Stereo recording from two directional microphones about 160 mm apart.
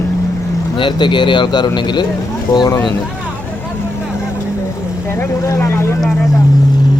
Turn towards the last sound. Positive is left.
turn(degrees=0)  # may be behind; listen again after turning